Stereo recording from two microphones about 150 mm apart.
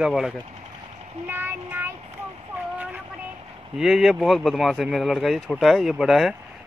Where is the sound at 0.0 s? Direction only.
5° right (ahead or behind).